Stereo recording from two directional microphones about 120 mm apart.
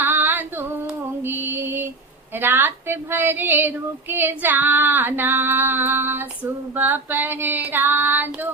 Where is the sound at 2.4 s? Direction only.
15° right (ahead or behind).